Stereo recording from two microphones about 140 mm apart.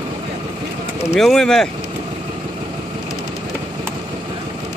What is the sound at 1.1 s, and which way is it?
Speech, centre (ahead or behind).